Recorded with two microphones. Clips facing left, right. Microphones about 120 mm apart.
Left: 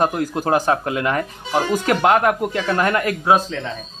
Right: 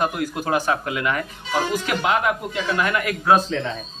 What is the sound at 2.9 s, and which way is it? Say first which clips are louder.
Speech: left 4 dB; 35° left (ahead or behind).